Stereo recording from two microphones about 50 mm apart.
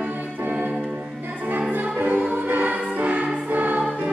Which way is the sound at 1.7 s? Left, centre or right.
Right.